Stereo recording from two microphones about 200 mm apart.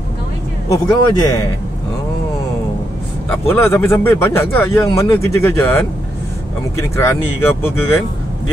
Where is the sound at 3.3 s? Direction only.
10° left (ahead or behind).